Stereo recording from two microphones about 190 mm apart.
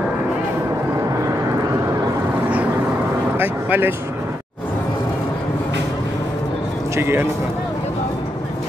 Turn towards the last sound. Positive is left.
turn(degrees=-15)  # may be behind; listen again after turning